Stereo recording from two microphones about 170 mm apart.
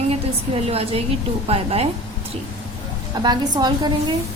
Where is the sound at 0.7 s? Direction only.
35° right (ahead or behind).